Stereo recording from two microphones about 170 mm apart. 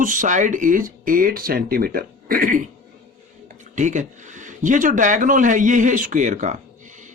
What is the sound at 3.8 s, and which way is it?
Speech, 45° right (ahead or behind).